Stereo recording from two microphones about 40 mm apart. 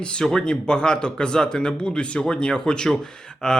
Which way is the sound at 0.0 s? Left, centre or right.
Left.